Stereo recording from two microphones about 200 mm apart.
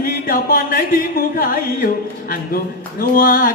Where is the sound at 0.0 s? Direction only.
45° left (ahead or behind).